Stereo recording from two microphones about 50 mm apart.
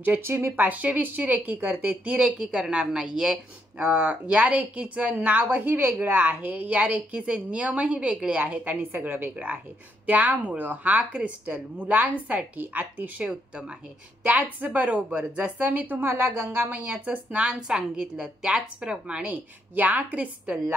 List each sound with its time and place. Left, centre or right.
0.2 s speech: right
0.7 s a woman's voice: right
2.3 s a woman's voice: centre
3.8 s a woman's voice: right
16.0 s speech: right
16.6 s a woman's voice: right
17.5 s a woman's voice: centre
19.2 s a woman's voice: right